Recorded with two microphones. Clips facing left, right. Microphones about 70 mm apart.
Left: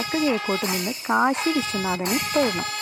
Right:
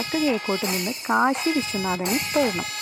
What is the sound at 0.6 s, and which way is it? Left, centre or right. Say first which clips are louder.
Speech: even; left.